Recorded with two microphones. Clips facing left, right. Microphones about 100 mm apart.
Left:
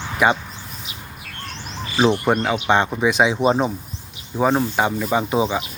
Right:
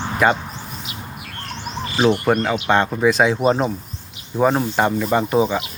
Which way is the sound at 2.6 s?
15° left (ahead or behind).